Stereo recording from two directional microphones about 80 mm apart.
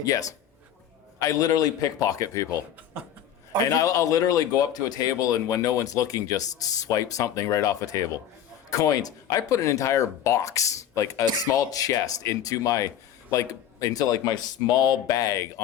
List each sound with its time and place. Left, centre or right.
0.0 s speech: left
3.8 s speech: left